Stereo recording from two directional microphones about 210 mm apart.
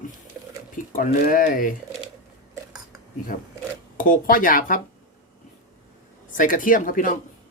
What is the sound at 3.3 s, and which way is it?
Speech, 40° left (ahead or behind).